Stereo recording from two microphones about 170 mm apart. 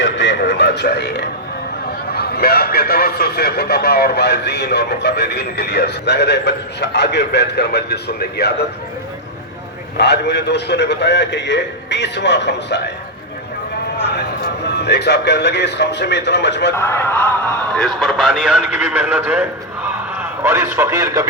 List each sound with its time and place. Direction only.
0.0 s a sound: 90° left
2.1 s a man's voice: 65° left (ahead or behind)
10.0 s a man's voice: 85° left
14.0 s a man's voice: 80° left
16.7 s a man's voice: 15° left (ahead or behind); by 21.2 s 15° right (ahead or behind)